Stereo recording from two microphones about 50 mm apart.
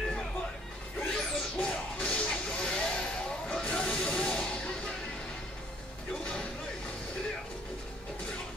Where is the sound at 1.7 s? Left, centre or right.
Left.